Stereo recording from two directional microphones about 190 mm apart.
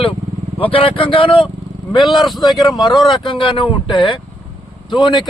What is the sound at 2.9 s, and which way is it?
Speech, centre (ahead or behind).